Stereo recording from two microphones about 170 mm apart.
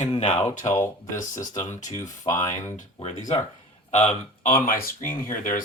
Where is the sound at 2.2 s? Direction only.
20° left (ahead or behind).